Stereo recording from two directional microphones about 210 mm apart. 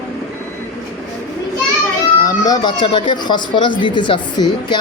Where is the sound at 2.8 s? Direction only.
20° left (ahead or behind).